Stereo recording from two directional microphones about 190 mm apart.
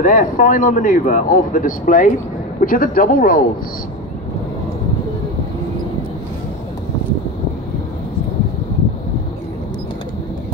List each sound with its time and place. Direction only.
0.0 s speech: 45° left (ahead or behind)